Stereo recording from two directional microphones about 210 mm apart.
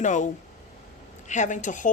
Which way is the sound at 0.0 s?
35° left (ahead or behind).